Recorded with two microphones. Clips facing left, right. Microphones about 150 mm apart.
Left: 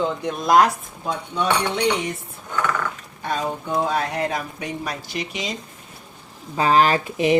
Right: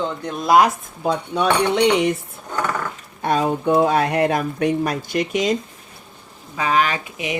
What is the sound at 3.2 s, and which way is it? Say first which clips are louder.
Speech: right 7 dB; 60° right (ahead or behind).